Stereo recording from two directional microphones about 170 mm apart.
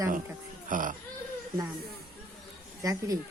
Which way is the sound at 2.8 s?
20° right (ahead or behind).